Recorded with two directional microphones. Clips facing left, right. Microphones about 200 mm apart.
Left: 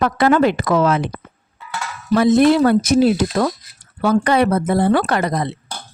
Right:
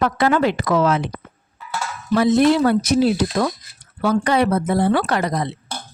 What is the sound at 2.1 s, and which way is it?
Speech, 50° left (ahead or behind).